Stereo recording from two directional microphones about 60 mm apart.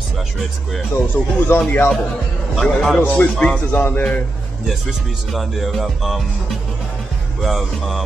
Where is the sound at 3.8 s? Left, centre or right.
Left.